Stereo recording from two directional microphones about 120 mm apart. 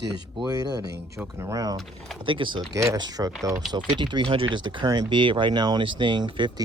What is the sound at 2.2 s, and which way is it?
Speech, 45° right (ahead or behind).